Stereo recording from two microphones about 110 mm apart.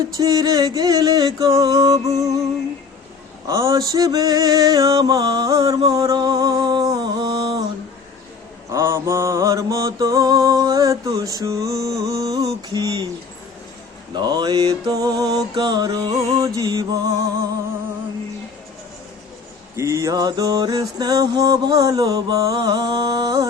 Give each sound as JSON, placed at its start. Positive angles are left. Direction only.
{"t": 0.2, "sound": "music", "side_deg": -35}
{"t": 3.4, "sound": "music", "side_deg": -30}
{"t": 8.7, "sound": "mantra", "side_deg": -25}
{"t": 11.3, "sound": "a sound", "side_deg": -30}
{"t": 14.2, "sound": "music", "side_deg": -40}
{"t": 19.7, "sound": "music", "side_deg": -30}